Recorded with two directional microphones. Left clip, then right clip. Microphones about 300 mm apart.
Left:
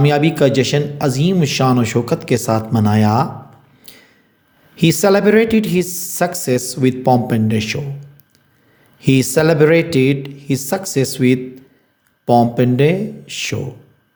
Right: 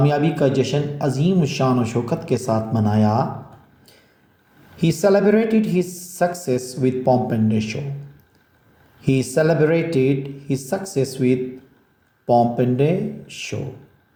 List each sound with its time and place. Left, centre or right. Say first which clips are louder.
0.0 s a man's voice: left 5 dB; left
4.8 s a man's voice: left 4 dB; left
9.0 s a man's voice: left 4 dB; left